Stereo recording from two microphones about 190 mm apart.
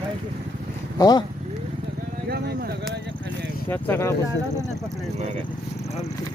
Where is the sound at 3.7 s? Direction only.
10° left (ahead or behind).